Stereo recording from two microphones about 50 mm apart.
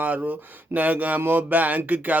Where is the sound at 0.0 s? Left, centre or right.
Right.